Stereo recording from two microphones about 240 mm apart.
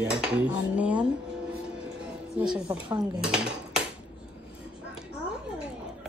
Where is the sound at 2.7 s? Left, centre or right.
Centre.